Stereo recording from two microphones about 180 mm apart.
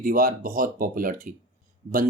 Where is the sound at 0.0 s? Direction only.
50° right (ahead or behind).